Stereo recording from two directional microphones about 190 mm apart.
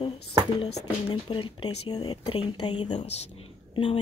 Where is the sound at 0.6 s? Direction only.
25° left (ahead or behind).